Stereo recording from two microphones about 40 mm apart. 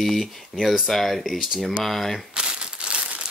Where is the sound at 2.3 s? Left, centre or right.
Right.